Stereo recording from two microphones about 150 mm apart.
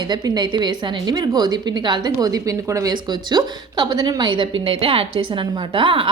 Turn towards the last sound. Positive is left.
turn(degrees=-35)  # may be behind; listen again after turning